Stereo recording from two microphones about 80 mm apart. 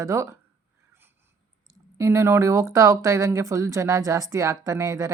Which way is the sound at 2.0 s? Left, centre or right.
Right.